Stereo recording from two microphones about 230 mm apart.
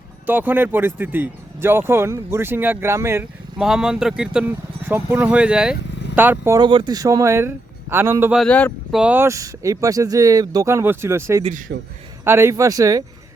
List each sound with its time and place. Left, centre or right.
0.3 s speech: centre
8.4 s speech: centre
9.0 s speech: centre
11.7 s a man's voice: right
12.2 s speech: centre